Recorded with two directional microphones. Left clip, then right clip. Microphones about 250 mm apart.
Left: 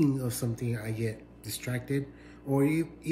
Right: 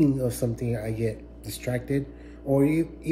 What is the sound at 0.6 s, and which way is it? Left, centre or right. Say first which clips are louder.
Speech: right 6 dB; centre.